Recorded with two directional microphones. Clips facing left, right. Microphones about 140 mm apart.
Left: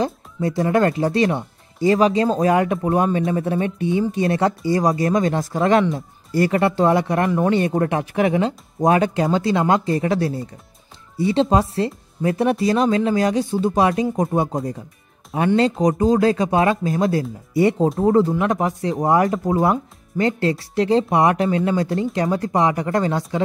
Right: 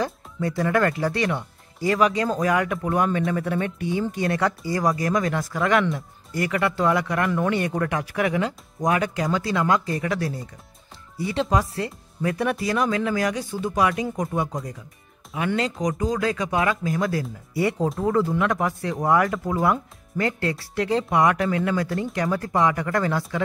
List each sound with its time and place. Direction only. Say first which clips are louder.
0.0 s speech: left 4 dB; 25° left (ahead or behind)